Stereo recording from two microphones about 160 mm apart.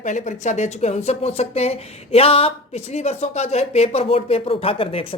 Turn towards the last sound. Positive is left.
turn(degrees=35)  # may be behind; listen again after turning